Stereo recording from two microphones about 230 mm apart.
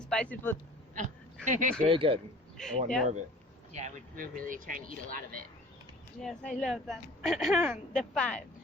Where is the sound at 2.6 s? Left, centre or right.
Centre.